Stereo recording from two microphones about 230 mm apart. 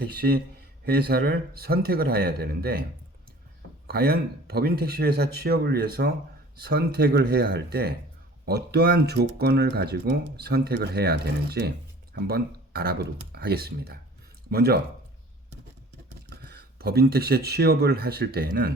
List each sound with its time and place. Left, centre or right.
0.0 s speech: right
3.8 s speech: right
16.3 s speech: right